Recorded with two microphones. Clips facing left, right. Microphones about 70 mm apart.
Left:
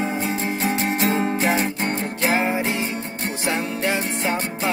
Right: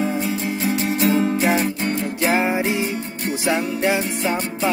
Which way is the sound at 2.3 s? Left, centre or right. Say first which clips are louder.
Right 2 dB; centre.